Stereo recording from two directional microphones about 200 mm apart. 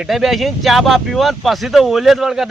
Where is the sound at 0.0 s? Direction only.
Centre (ahead or behind).